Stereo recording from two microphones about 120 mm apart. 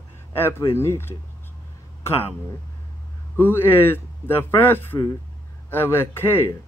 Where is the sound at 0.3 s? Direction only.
20° left (ahead or behind).